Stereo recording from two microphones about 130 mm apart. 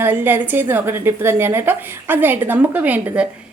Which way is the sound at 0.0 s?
15° right (ahead or behind).